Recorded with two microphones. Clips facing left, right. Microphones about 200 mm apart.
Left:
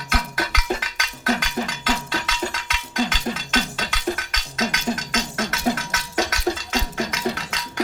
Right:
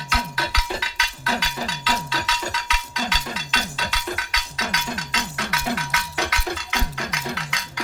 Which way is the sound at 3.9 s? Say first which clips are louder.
Left 4 dB; 45° left (ahead or behind).